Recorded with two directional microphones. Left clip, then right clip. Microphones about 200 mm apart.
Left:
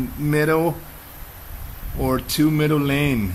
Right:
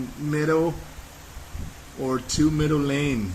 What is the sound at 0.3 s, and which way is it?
Speech, 45° left (ahead or behind).